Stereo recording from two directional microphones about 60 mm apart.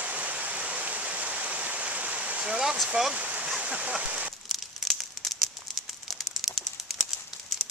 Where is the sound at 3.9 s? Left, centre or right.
Centre.